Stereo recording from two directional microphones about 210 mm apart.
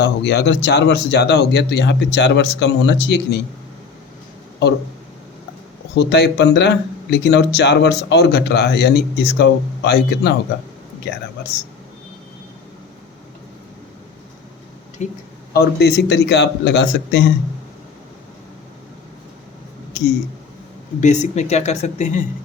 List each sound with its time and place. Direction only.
0.0 s speech: 55° left (ahead or behind)
6.0 s speech: 55° left (ahead or behind)
15.0 s speech: 35° left (ahead or behind)
15.5 s speech: 50° left (ahead or behind)
21.0 s speech: 35° left (ahead or behind)